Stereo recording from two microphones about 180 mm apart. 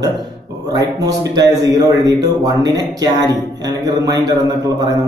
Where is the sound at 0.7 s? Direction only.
20° right (ahead or behind).